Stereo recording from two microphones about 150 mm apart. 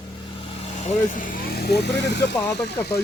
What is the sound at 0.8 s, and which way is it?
Speech, 65° left (ahead or behind).